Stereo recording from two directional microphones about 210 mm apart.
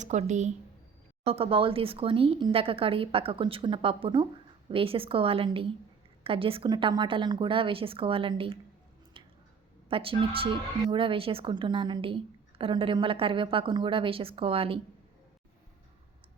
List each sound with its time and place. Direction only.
0.0 s a woman's voice: 35° right (ahead or behind)
9.2 s a sound: 25° right (ahead or behind)
9.9 s a woman's voice: 25° right (ahead or behind)